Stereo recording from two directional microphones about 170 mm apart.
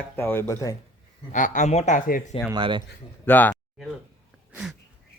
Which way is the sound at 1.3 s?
45° left (ahead or behind).